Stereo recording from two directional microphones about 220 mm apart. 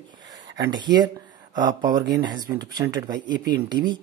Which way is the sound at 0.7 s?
20° right (ahead or behind).